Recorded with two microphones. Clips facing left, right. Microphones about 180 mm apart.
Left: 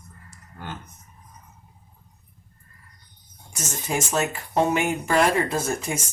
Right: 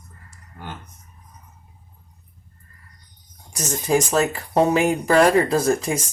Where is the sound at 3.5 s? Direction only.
35° right (ahead or behind).